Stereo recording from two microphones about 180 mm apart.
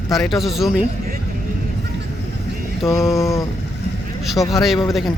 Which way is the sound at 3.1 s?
15° left (ahead or behind).